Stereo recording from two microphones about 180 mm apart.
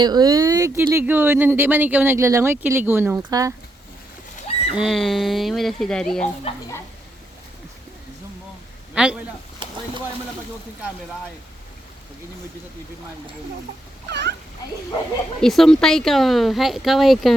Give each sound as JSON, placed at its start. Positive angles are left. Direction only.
{"t": 0.0, "sound": "speech", "side_deg": -20}
{"t": 4.8, "sound": "speech", "side_deg": 0}
{"t": 6.5, "sound": "speech", "side_deg": 30}
{"t": 9.0, "sound": "speech", "side_deg": -5}
{"t": 9.6, "sound": "chopping", "side_deg": -25}
{"t": 14.1, "sound": "speech", "side_deg": -70}
{"t": 15.4, "sound": "speech", "side_deg": 0}